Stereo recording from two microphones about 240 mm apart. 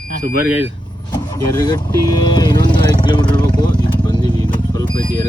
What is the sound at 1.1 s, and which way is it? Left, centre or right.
Speech, centre.